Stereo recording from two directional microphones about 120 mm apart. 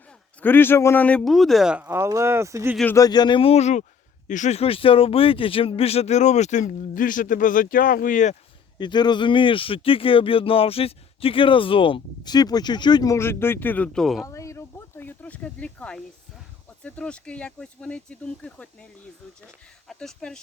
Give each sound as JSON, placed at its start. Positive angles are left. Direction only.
{"t": 0.4, "sound": "speech", "side_deg": 15}
{"t": 1.2, "sound": "speech", "side_deg": 0}
{"t": 1.9, "sound": "speech", "side_deg": -25}
{"t": 2.9, "sound": "speech", "side_deg": 35}
{"t": 4.3, "sound": "a man's voice", "side_deg": 85}
{"t": 8.8, "sound": "speech", "side_deg": 40}
{"t": 13.1, "sound": "speech", "side_deg": 20}
{"t": 14.3, "sound": "speech", "side_deg": 25}
{"t": 19.9, "sound": "speech", "side_deg": 5}